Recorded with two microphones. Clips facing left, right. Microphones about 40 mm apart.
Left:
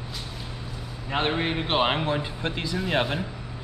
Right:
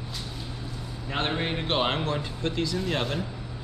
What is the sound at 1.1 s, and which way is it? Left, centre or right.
A man's voice, centre.